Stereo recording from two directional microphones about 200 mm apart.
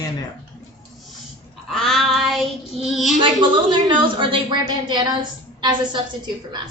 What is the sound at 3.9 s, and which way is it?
A woman's voice, 25° right (ahead or behind).